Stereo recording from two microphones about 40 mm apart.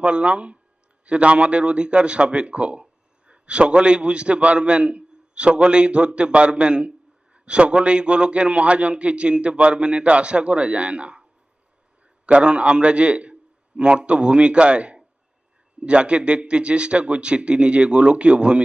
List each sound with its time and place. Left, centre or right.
0.0 s a man's voice: right
12.3 s a man's voice: right